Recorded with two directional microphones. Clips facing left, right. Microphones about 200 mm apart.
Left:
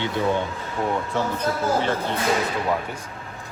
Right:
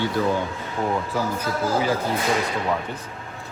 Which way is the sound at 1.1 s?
5° right (ahead or behind).